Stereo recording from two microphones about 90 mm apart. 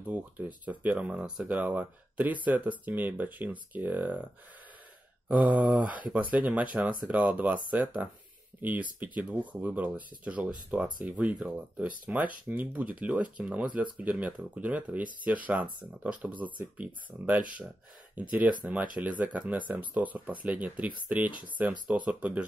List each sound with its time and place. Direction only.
0.0 s speech: 15° right (ahead or behind)
5.3 s speech: 15° right (ahead or behind)